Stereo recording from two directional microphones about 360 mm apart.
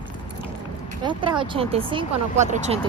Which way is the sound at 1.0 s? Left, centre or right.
Centre.